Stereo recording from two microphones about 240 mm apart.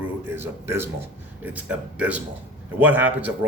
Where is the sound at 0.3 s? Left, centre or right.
Centre.